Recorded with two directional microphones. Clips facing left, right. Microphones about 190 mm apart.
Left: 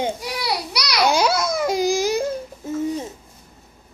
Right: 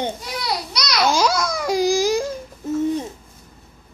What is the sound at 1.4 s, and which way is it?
Baby cry, 5° left (ahead or behind).